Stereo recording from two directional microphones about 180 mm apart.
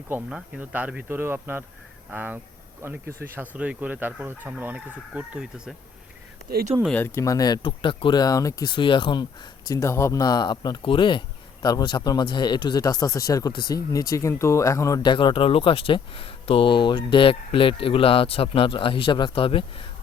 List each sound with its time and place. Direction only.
0.1 s speech: 5° right (ahead or behind)
6.8 s speech: 10° left (ahead or behind); by 19.8 s 30° left (ahead or behind)